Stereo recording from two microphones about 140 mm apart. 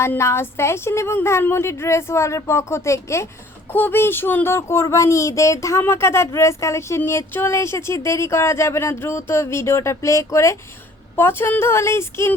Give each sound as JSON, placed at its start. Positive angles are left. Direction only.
{"t": 0.0, "sound": "speech", "side_deg": 20}